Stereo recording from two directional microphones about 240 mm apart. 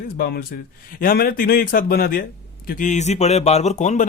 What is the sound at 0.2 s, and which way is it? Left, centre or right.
Speech, left.